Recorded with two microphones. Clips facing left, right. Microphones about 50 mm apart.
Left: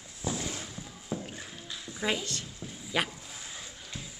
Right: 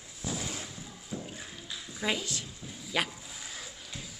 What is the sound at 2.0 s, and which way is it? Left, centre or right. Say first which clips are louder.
A child's voice: left 1 dB; centre.